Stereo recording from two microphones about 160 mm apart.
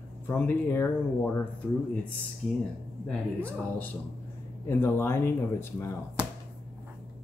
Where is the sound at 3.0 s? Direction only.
10° left (ahead or behind).